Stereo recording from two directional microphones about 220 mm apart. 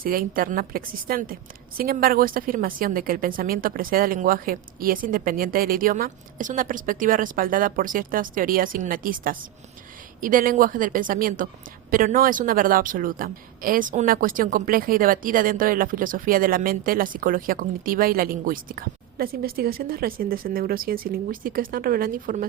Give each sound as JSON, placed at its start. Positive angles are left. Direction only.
{"t": 0.0, "sound": "a woman's voice", "side_deg": -40}